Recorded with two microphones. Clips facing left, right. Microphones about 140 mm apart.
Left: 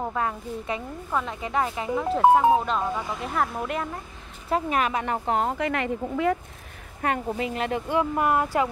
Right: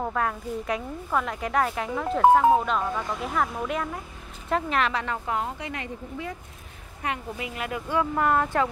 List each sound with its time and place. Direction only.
0.0 s a woman's voice: 5° left (ahead or behind)
3.2 s a woman's voice: centre (ahead or behind)
4.5 s speech: 10° left (ahead or behind)
5.3 s speech: 55° left (ahead or behind)
7.0 s speech: 40° left (ahead or behind)
7.9 s speech: 15° left (ahead or behind)